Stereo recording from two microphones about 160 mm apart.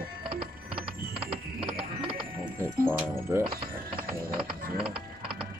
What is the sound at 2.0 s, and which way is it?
Music, 35° right (ahead or behind).